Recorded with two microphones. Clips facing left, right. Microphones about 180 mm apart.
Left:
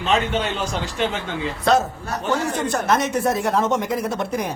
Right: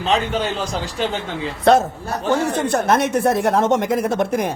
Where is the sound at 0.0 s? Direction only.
35° right (ahead or behind).